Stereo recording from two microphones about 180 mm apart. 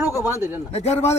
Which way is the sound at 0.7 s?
35° left (ahead or behind).